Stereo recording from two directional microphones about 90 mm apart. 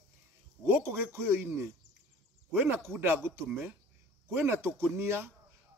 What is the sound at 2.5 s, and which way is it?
Speech, 25° right (ahead or behind).